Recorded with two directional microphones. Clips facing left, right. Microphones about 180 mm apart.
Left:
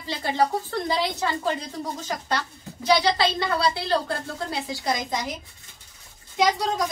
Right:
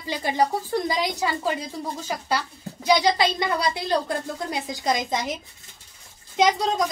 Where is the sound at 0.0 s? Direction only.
15° right (ahead or behind).